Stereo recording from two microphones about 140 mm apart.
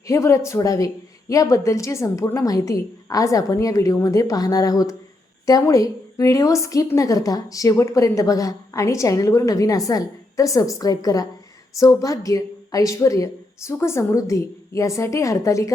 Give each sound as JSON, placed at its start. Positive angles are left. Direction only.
{"t": 0.1, "sound": "a woman's voice", "side_deg": 20}